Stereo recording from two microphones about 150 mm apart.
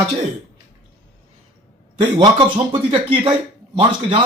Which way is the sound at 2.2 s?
35° right (ahead or behind).